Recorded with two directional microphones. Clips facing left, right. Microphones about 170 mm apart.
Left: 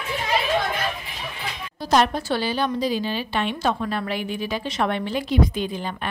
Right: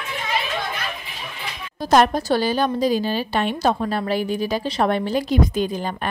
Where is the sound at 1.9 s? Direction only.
45° right (ahead or behind).